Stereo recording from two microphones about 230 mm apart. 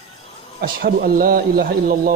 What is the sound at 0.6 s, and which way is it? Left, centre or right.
Speech, right.